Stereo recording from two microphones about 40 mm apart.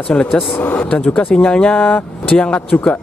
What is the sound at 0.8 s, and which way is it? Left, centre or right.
Speech, left.